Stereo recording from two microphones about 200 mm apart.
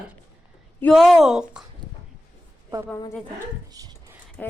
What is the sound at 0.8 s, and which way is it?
Speech, centre (ahead or behind).